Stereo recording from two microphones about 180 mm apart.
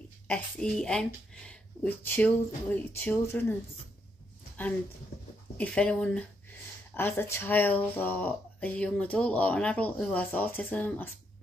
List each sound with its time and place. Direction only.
0.3 s speech: 5° left (ahead or behind)
5.6 s speech: 5° left (ahead or behind)